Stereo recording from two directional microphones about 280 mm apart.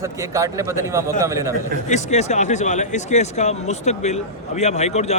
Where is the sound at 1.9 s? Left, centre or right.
Left.